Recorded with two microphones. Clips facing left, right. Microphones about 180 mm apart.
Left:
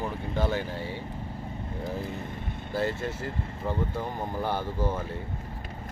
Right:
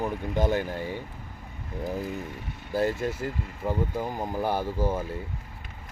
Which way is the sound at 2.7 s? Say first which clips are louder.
Right 3 dB; 10° right (ahead or behind).